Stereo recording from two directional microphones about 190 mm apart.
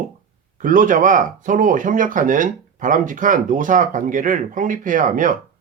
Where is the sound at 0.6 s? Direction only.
45° right (ahead or behind).